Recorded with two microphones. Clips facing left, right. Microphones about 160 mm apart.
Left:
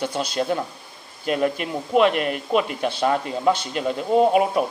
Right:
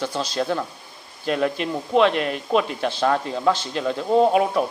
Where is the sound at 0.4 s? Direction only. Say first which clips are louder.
Even; 10° left (ahead or behind).